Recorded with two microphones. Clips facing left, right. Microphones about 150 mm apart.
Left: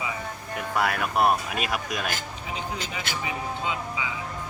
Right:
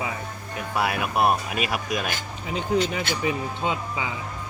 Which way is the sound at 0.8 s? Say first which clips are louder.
Right 1 dB; 10° right (ahead or behind).